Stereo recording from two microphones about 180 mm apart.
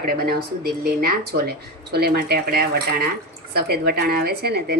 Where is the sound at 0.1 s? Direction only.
60° right (ahead or behind).